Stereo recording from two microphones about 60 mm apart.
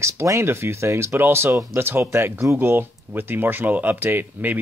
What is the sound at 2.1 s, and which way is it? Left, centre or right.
Speech, right.